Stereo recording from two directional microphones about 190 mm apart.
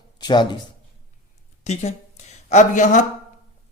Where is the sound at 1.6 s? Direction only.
35° left (ahead or behind).